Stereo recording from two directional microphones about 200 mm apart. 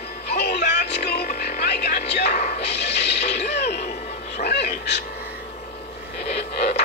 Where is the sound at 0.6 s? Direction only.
55° left (ahead or behind).